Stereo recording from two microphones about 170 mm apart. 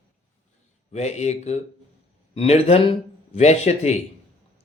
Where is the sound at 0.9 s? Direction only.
40° left (ahead or behind).